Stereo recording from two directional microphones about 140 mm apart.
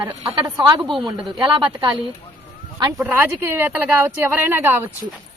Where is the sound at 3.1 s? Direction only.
15° right (ahead or behind).